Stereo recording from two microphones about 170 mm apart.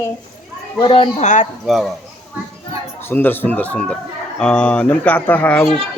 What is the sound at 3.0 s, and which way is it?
A man's voice, 10° left (ahead or behind).